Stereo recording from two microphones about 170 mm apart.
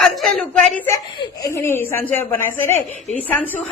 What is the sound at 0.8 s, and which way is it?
A woman's voice, 20° left (ahead or behind).